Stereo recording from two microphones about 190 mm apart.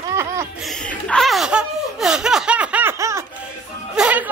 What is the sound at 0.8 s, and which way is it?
Laughter, 5° left (ahead or behind).